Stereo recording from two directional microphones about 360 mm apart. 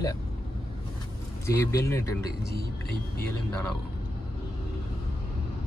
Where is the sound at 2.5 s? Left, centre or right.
Left.